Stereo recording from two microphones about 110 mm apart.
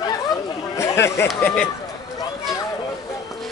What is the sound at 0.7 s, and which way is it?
Speech, 25° left (ahead or behind).